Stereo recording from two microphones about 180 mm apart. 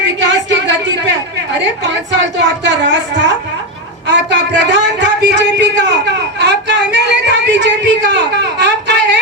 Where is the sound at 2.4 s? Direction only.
75° right (ahead or behind).